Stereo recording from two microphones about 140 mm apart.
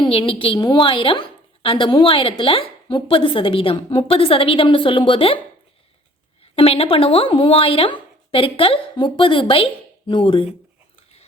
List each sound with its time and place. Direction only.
0.1 s speech: 40° left (ahead or behind)
6.4 s speech: 45° left (ahead or behind)